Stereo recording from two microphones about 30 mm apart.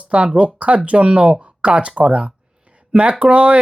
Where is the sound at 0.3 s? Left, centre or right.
Right.